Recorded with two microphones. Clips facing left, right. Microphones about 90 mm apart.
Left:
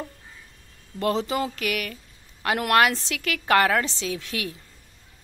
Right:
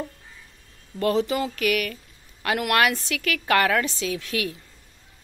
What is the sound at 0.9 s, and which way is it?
A woman's voice, 25° left (ahead or behind).